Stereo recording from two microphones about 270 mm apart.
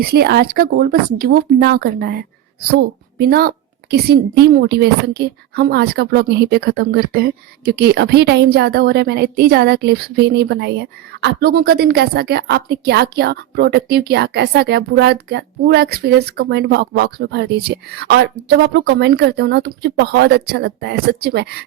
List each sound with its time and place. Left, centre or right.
0.0 s speech: right